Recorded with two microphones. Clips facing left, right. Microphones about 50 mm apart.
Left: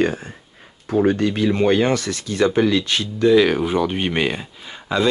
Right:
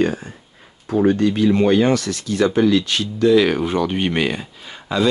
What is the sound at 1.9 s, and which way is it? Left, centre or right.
Speech, left.